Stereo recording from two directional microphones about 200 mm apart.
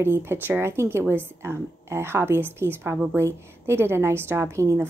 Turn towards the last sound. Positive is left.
turn(degrees=-15)  # may be behind; listen again after turning